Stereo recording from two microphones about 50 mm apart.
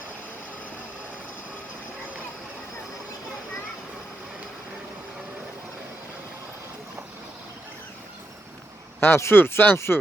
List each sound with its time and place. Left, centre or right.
9.0 s speech: left
9.4 s speech: left